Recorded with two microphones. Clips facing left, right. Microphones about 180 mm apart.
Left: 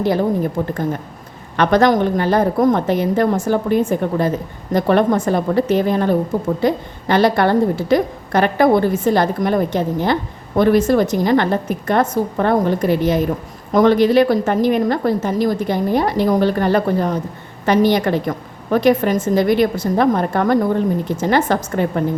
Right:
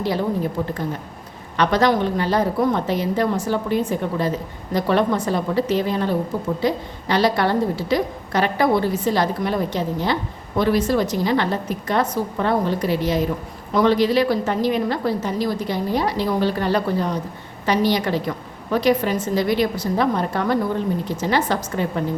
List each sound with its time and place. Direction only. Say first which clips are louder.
1.5 s a woman's voice: left 4 dB; 50° left (ahead or behind)